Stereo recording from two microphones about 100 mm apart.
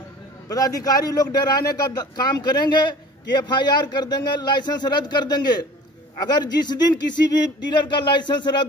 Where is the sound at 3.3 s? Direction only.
45° left (ahead or behind).